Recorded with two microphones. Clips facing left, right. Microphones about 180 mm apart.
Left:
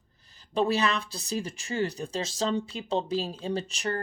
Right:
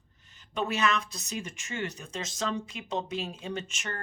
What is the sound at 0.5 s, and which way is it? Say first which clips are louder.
Speech: left 3 dB; 35° left (ahead or behind).